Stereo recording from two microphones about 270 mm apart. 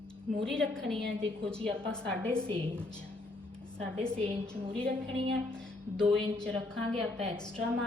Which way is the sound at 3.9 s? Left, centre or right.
Centre.